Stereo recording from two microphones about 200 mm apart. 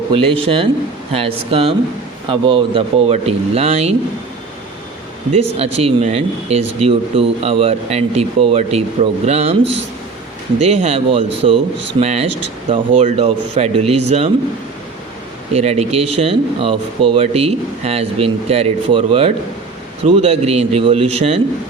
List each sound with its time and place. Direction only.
0.1 s speech: 25° right (ahead or behind)
5.4 s speech: 30° right (ahead or behind)
10.6 s speech: 30° right (ahead or behind)
15.5 s speech: 30° right (ahead or behind)